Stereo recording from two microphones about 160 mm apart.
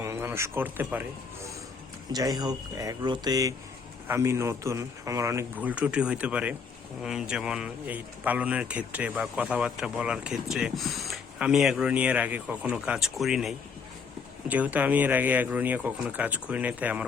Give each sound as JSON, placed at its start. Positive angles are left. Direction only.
{"t": 0.0, "sound": "speech", "side_deg": -15}
{"t": 2.1, "sound": "speech", "side_deg": -25}